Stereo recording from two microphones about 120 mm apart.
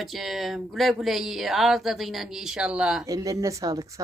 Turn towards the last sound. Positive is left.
turn(degrees=-30)  # may be behind; listen again after turning